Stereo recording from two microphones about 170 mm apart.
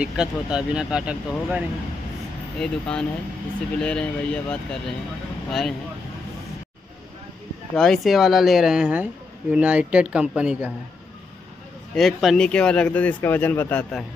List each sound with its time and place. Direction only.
0.0 s speech: 5° right (ahead or behind)
2.6 s speech: 5° left (ahead or behind)
7.7 s speech: 5° left (ahead or behind)
11.9 s speech: centre (ahead or behind)